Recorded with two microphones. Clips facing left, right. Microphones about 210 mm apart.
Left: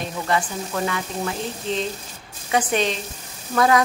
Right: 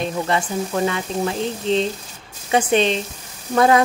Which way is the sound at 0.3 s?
25° right (ahead or behind).